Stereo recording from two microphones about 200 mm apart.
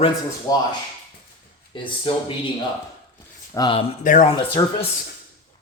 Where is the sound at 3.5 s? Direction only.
20° left (ahead or behind).